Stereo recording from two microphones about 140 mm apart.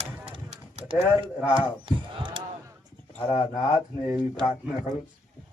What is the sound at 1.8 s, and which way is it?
Basketball bounce, 35° right (ahead or behind).